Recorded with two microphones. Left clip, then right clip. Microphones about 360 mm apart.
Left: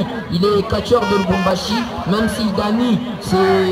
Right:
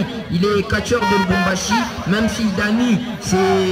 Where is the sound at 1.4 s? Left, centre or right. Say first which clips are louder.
Even; centre.